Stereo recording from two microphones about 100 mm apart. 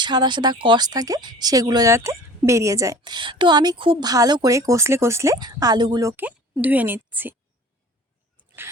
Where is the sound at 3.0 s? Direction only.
50° right (ahead or behind).